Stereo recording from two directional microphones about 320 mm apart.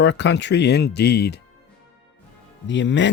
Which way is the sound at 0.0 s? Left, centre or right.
Left.